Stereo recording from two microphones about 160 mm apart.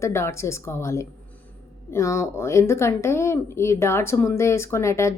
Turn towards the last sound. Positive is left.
turn(degrees=20)  # may be behind; listen again after turning